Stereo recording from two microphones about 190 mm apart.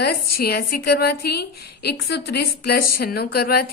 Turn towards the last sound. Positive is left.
turn(degrees=55)  # may be behind; listen again after turning